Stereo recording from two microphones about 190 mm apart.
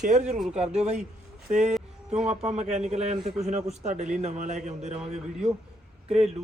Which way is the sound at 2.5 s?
35° right (ahead or behind).